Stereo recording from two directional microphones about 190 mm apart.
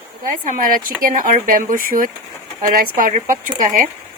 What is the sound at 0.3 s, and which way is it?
Speech, 45° right (ahead or behind).